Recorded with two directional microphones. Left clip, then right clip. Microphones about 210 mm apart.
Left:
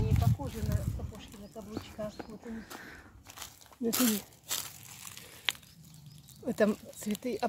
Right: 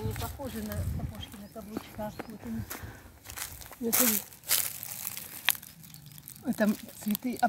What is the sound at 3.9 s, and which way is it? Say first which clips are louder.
Crumpling: right 3 dB; 40° right (ahead or behind).